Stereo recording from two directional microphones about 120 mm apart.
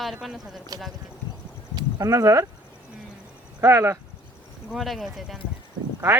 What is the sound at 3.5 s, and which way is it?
Speech, 25° right (ahead or behind).